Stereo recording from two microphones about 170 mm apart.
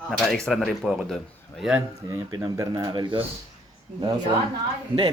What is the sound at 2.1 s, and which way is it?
Speech, 20° right (ahead or behind).